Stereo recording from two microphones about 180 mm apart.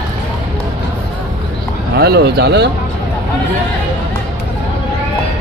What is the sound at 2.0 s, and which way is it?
Speech, 60° right (ahead or behind).